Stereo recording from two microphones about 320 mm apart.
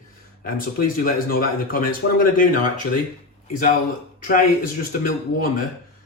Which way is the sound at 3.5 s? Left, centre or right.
Left.